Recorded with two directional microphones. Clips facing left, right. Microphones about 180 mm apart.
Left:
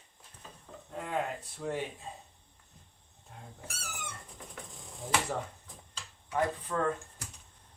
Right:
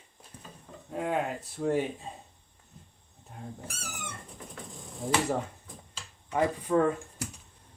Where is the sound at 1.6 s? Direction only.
15° right (ahead or behind).